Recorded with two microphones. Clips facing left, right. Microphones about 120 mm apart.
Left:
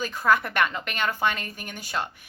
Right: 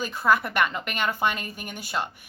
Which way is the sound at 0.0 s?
10° right (ahead or behind).